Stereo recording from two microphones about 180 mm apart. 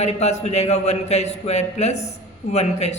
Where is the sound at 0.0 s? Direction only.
40° left (ahead or behind).